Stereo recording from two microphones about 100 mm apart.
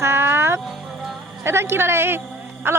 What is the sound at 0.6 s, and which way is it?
Music, centre (ahead or behind).